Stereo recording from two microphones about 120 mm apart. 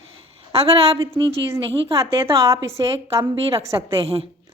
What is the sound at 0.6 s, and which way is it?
Speech, 55° right (ahead or behind).